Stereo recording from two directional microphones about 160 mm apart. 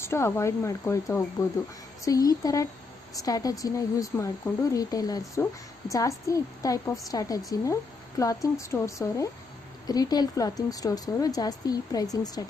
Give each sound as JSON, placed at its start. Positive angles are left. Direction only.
{"t": 0.0, "sound": "speech", "side_deg": 15}